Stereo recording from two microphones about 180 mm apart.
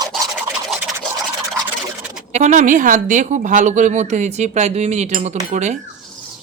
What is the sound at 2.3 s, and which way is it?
Speech, 40° right (ahead or behind).